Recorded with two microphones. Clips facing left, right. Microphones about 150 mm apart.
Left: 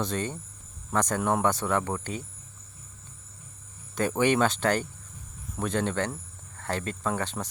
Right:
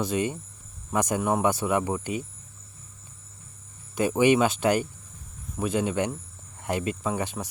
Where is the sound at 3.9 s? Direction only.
10° right (ahead or behind).